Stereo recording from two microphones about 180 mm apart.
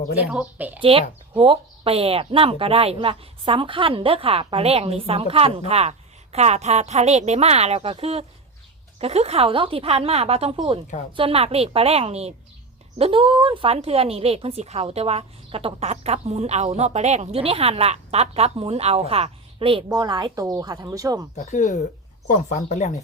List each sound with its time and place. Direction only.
0.3 s speech: 5° right (ahead or behind)
0.8 s a woman's voice: 30° right (ahead or behind)
21.3 s speech: 40° left (ahead or behind)